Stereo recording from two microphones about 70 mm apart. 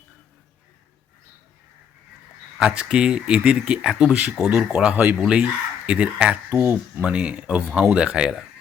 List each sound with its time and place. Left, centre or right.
2.6 s speech: centre
6.5 s speech: right
7.0 s speech: centre